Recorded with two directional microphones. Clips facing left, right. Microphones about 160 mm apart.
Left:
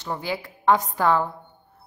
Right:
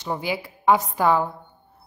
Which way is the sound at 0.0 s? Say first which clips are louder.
Right 2 dB; 15° right (ahead or behind).